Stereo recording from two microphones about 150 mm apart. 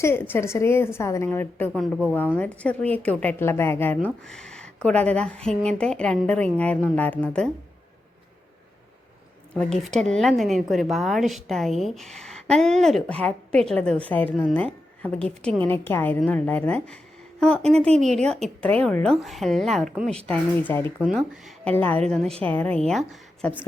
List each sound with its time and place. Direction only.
0.0 s speech: 15° left (ahead or behind)
9.6 s speech: 5° left (ahead or behind)
21.0 s speech: centre (ahead or behind)